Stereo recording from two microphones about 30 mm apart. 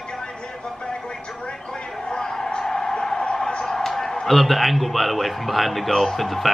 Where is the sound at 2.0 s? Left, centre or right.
Left.